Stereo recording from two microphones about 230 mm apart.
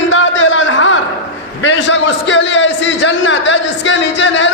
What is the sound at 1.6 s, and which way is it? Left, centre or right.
A man's voice, left.